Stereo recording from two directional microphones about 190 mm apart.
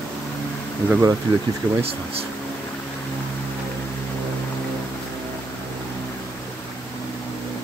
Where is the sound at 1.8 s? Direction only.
30° right (ahead or behind).